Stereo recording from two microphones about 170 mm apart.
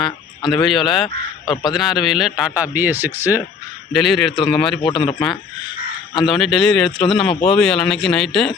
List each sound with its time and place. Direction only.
0.6 s speech: centre (ahead or behind)
1.0 s speech: 25° left (ahead or behind)
1.7 s speech: centre (ahead or behind)
3.9 s speech: centre (ahead or behind)
4.8 s speech: 30° left (ahead or behind)
6.2 s speech: centre (ahead or behind)